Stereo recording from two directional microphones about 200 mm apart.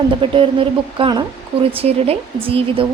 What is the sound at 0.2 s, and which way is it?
Speech, 25° right (ahead or behind).